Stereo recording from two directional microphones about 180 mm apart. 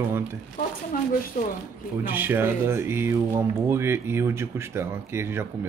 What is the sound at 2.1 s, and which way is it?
Speech, 10° right (ahead or behind).